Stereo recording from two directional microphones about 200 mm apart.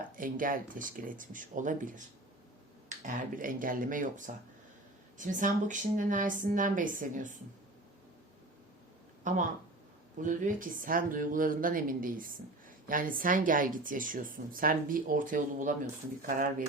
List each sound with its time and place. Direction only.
0.2 s a woman's voice: 45° right (ahead or behind)
3.3 s a woman's voice: 45° right (ahead or behind)
9.2 s speech: 40° right (ahead or behind)